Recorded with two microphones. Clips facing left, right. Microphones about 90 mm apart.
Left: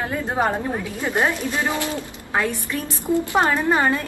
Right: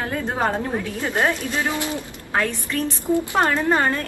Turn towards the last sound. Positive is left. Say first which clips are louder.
# left 1 dB
turn(degrees=15)  # may be behind; listen again after turning